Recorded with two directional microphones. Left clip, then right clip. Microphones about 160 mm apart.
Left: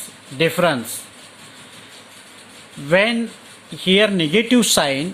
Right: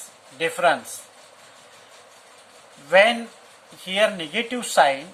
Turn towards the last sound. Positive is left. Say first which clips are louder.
# left 2 dB
turn(degrees=60)  # may be behind; listen again after turning